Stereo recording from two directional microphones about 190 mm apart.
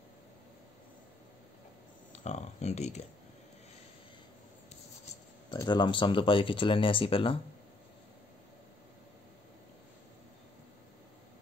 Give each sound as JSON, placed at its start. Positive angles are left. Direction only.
{"t": 2.1, "sound": "speech", "side_deg": 35}
{"t": 5.5, "sound": "speech", "side_deg": 25}